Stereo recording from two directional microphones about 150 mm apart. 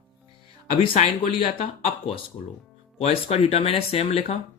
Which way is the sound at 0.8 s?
40° left (ahead or behind).